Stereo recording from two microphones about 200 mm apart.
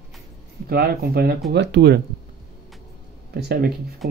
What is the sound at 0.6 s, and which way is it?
Speech, 50° right (ahead or behind).